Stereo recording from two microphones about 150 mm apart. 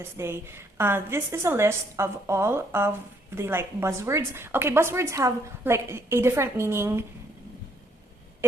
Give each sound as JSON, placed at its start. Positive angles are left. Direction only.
{"t": 0.0, "sound": "a woman's voice", "side_deg": -15}